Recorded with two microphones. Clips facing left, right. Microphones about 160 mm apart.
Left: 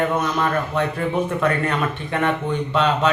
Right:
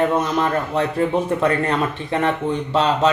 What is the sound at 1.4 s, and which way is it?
Speech, 30° right (ahead or behind).